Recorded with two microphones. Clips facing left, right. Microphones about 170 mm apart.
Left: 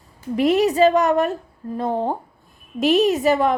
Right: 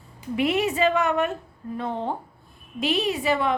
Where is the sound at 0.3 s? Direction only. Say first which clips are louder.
Left 7 dB; 40° left (ahead or behind).